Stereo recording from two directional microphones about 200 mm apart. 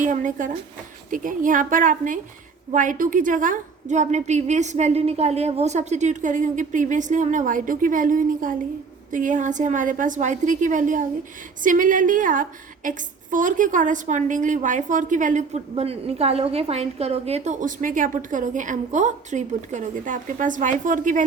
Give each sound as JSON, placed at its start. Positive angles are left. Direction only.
{"t": 0.0, "sound": "a woman's voice", "side_deg": -40}